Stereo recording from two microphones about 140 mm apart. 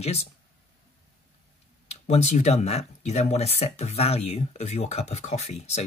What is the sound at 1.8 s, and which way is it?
Speech, 50° left (ahead or behind).